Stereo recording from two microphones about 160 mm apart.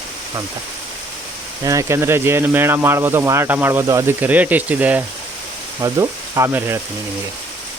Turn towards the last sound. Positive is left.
turn(degrees=-15)  # may be behind; listen again after turning